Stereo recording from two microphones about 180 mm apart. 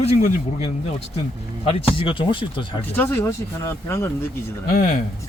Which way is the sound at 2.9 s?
10° left (ahead or behind).